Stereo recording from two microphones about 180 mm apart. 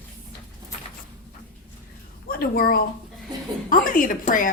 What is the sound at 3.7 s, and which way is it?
Speech, 50° left (ahead or behind).